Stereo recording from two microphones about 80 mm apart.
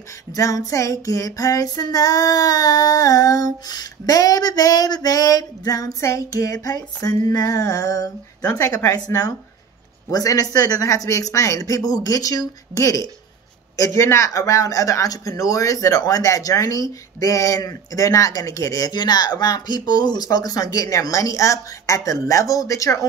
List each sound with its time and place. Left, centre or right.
0.3 s female singing: left
18.9 s female singing: left